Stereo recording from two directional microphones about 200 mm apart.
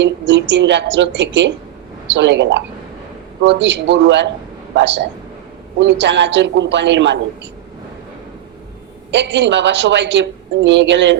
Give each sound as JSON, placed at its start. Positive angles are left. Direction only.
{"t": 0.0, "sound": "a woman's voice", "side_deg": -65}
{"t": 9.1, "sound": "a woman's voice", "side_deg": -60}